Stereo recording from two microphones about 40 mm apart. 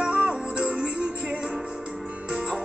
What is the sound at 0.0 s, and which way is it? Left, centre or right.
Music, right.